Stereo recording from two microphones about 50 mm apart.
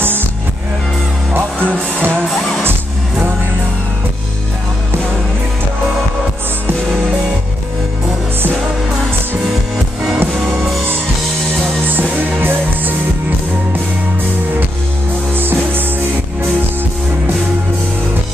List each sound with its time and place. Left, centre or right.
0.0 s music: right
1.3 s music: right
2.2 s music: centre
11.9 s music: right
15.3 s music: right